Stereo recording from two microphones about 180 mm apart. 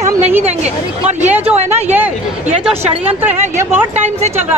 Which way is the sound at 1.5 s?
40° right (ahead or behind).